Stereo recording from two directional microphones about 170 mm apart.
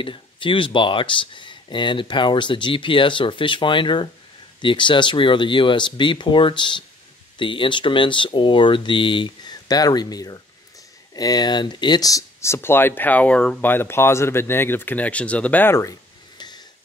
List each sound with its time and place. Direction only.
0.0 s speech: 30° left (ahead or behind)